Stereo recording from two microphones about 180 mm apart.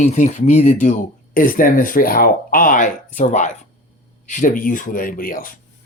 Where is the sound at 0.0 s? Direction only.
40° left (ahead or behind).